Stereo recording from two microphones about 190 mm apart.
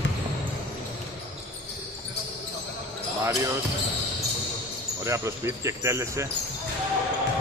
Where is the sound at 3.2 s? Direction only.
15° right (ahead or behind).